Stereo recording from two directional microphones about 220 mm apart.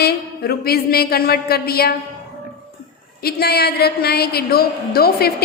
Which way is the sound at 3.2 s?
45° left (ahead or behind).